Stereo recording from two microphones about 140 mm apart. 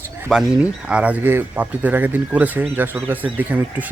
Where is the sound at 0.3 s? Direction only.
5° right (ahead or behind).